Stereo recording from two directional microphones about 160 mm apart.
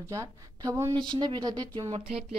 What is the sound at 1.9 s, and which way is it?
Speech, 40° right (ahead or behind).